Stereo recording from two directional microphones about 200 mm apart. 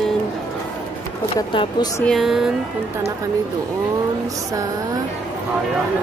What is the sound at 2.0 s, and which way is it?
Speech, centre (ahead or behind).